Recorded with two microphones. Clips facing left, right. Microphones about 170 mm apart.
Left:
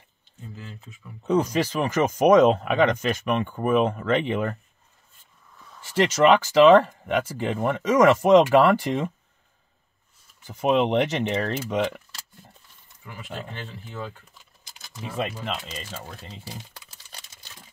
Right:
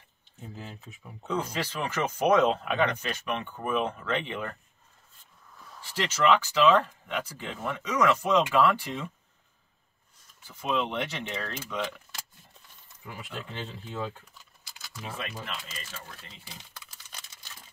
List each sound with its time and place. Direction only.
1.2 s speech: 55° left (ahead or behind)
5.9 s speech: 65° left (ahead or behind)
6.9 s speech: 65° left (ahead or behind); by 9.1 s 85° left
10.4 s speech: 70° left (ahead or behind)